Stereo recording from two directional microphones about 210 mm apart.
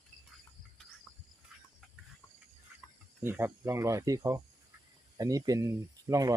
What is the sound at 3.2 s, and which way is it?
Speech, 10° right (ahead or behind).